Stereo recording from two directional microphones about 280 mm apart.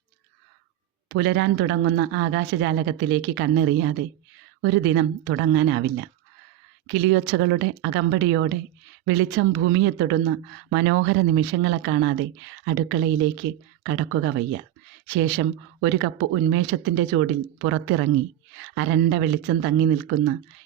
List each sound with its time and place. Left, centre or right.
1.0 s speech: right